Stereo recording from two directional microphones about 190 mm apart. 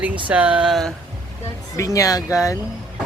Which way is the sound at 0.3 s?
5° right (ahead or behind).